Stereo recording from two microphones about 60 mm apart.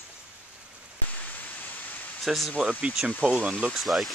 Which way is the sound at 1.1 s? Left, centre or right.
Left.